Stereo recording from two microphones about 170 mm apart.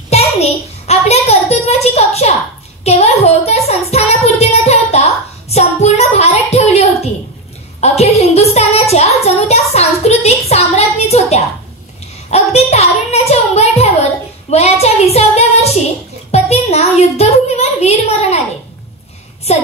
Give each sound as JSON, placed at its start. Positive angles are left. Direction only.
{"t": 0.1, "sound": "a sound", "side_deg": 40}
{"t": 2.8, "sound": "a woman's voice", "side_deg": 40}
{"t": 3.9, "sound": "child singing", "side_deg": 40}
{"t": 7.8, "sound": "a woman's voice", "side_deg": 40}
{"t": 14.5, "sound": "child singing", "side_deg": 40}
{"t": 16.3, "sound": "a child's voice", "side_deg": 40}